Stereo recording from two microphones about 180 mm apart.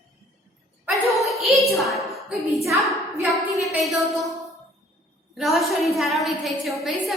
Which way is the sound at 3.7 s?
Centre (ahead or behind).